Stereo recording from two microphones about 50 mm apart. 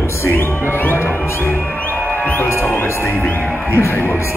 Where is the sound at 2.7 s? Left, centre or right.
Left.